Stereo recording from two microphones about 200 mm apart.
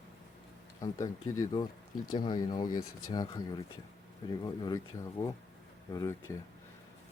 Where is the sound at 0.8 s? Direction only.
15° left (ahead or behind).